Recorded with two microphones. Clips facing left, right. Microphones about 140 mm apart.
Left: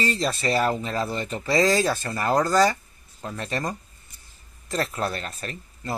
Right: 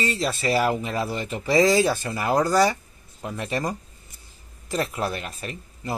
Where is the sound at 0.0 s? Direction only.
Centre (ahead or behind).